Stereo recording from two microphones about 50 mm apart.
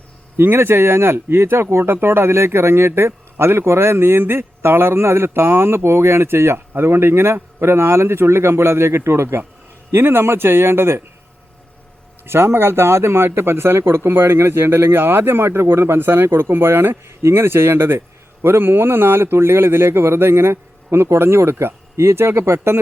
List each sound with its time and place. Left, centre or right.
0.3 s a man's voice: right
12.2 s speech: right
17.1 s a man's voice: right